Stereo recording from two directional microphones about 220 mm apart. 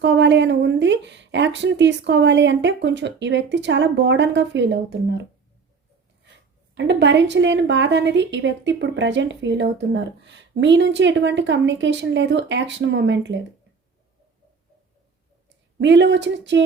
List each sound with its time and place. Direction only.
0.0 s speech: 55° right (ahead or behind)
6.7 s a woman's voice: 55° right (ahead or behind)
15.8 s speech: 55° right (ahead or behind)